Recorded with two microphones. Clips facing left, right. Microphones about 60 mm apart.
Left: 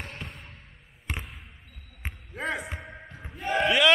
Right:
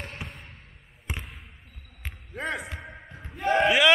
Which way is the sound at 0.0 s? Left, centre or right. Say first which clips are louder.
Right 1 dB; centre.